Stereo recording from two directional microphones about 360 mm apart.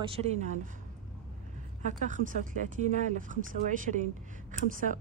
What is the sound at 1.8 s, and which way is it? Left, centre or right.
Speech, right.